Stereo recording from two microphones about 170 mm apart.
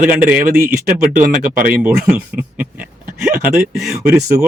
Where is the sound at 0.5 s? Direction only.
55° right (ahead or behind).